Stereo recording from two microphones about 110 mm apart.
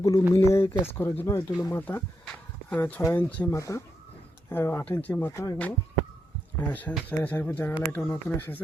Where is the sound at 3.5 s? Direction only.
30° left (ahead or behind).